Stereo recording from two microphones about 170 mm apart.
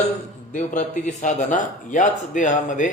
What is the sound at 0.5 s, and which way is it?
Speech, 45° left (ahead or behind).